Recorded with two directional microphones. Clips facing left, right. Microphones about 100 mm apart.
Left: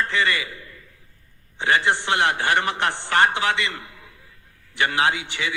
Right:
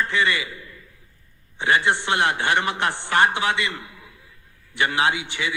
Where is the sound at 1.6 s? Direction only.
20° right (ahead or behind).